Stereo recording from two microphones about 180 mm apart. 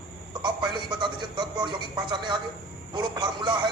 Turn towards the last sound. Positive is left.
turn(degrees=-25)  # may be behind; listen again after turning